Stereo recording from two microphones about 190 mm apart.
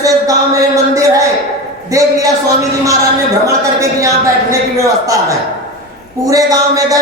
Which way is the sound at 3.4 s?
15° right (ahead or behind).